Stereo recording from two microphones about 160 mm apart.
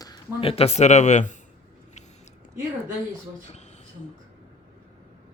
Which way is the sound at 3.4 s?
45° left (ahead or behind).